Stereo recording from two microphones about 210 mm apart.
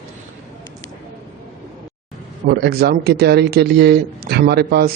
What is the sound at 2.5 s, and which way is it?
Speech, 45° right (ahead or behind).